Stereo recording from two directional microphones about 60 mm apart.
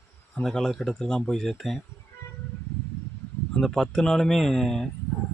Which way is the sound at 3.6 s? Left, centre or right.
Centre.